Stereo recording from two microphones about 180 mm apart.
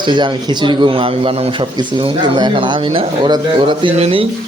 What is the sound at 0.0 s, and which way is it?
A man's voice, 25° right (ahead or behind).